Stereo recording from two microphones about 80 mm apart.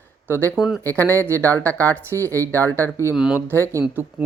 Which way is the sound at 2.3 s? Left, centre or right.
Left.